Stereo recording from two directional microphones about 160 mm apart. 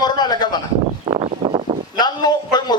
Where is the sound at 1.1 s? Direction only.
30° right (ahead or behind).